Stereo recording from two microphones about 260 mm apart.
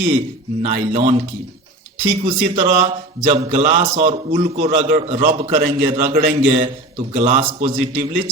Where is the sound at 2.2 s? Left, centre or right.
Right.